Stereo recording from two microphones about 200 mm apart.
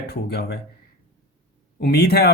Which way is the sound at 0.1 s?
55° left (ahead or behind).